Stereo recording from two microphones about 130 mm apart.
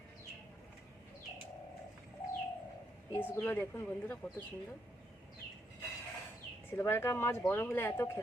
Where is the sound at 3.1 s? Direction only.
15° left (ahead or behind).